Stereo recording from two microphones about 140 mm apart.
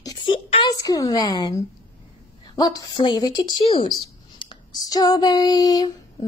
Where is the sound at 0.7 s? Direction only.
25° left (ahead or behind).